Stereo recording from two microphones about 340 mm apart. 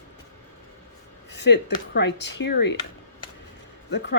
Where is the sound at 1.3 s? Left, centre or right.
Left.